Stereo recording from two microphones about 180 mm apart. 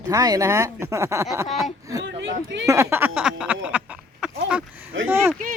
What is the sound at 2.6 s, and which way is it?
Speech, 15° right (ahead or behind).